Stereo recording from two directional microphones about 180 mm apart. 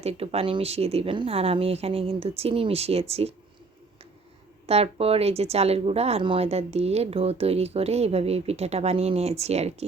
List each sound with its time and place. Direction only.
0.0 s speech: 35° right (ahead or behind)
4.6 s speech: 35° right (ahead or behind)